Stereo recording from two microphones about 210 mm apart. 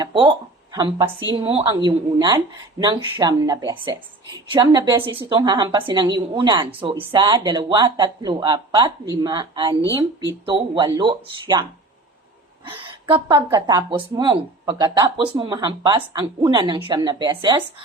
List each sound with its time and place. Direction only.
0.0 s a woman's voice: 20° right (ahead or behind)
12.7 s a woman's voice: 25° right (ahead or behind)